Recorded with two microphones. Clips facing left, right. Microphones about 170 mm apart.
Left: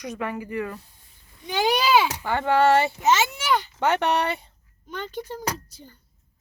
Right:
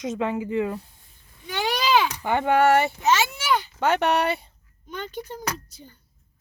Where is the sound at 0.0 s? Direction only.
25° right (ahead or behind).